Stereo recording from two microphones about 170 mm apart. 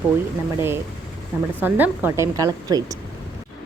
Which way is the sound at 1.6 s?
10° right (ahead or behind).